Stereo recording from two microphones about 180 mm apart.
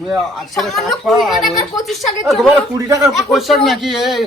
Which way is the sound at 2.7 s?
15° right (ahead or behind).